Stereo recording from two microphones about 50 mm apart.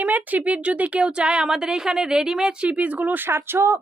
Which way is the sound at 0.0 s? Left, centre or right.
Right.